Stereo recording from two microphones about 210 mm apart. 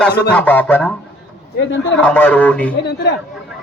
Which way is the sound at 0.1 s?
50° left (ahead or behind).